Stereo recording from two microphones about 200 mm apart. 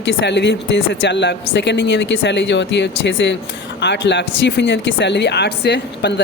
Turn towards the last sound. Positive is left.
turn(degrees=55)  # may be behind; listen again after turning